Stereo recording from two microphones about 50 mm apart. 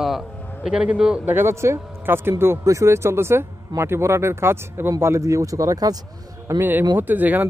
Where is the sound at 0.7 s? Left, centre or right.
Right.